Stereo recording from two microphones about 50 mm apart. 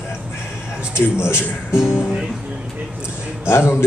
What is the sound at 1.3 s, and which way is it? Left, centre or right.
Speech, left.